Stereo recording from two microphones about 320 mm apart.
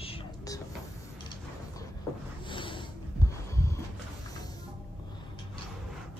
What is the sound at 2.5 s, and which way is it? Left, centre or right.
Snort, centre.